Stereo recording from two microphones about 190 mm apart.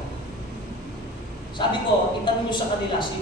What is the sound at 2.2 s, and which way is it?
Speech, 25° left (ahead or behind).